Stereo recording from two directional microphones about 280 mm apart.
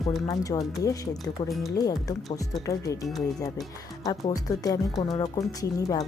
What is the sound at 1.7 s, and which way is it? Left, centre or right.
Speech, centre.